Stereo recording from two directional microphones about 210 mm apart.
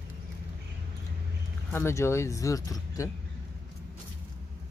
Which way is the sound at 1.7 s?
15° left (ahead or behind).